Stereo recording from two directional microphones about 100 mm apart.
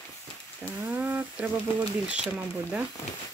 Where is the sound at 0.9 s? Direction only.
15° right (ahead or behind).